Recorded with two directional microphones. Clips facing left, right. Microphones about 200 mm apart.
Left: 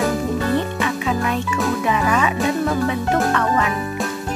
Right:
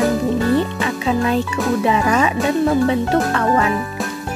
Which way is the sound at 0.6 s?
30° right (ahead or behind).